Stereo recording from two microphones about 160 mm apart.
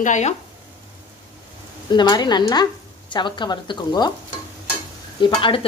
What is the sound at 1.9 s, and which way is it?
Speech, 25° left (ahead or behind).